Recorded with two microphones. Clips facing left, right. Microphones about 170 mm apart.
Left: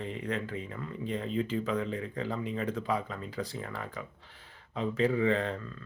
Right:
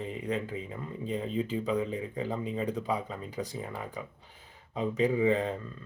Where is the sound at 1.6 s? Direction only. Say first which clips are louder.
Right 2 dB; 20° right (ahead or behind).